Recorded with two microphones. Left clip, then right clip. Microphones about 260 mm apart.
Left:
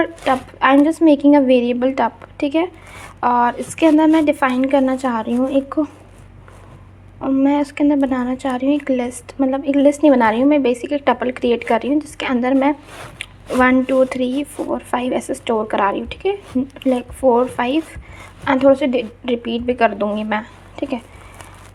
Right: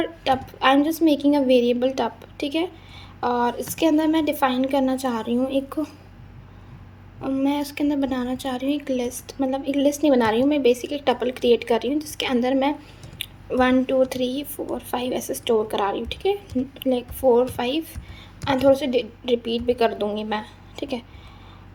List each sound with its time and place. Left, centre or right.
0.0 s speech: centre
7.2 s speech: centre
13.2 s a sound: centre
13.6 s a woman's voice: centre